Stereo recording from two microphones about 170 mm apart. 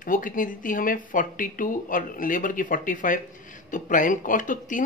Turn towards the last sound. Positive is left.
turn(degrees=50)  # may be behind; listen again after turning